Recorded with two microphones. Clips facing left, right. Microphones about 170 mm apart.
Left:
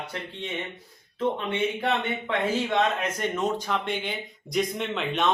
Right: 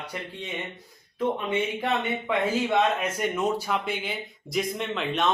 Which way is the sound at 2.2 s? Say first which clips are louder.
Right 1 dB; 10° right (ahead or behind).